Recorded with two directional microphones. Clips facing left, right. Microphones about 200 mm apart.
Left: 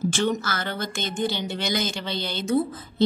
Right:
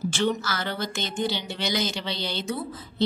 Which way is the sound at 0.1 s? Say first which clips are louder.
Left 1 dB; 50° left (ahead or behind).